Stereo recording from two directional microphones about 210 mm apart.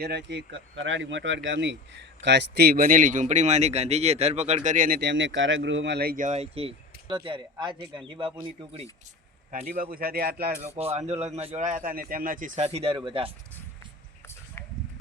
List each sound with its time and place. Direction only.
0.0 s speech: 55° right (ahead or behind); by 8.9 s 30° right (ahead or behind)
9.5 s speech: 40° right (ahead or behind)
10.8 s speech: 30° right (ahead or behind)